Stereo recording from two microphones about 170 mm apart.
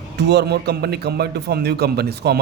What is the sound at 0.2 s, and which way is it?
A man's voice, 85° right.